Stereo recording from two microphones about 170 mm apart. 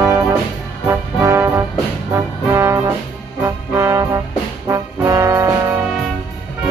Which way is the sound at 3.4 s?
15° right (ahead or behind).